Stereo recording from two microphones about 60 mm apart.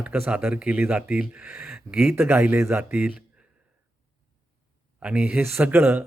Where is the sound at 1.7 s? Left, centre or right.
Centre.